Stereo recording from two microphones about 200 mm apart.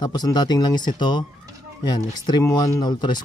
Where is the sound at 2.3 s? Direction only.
20° left (ahead or behind).